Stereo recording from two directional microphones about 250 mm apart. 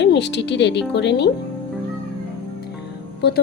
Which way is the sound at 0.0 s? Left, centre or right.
Left.